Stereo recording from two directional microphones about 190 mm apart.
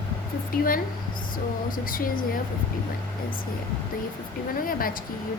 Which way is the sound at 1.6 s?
45° left (ahead or behind).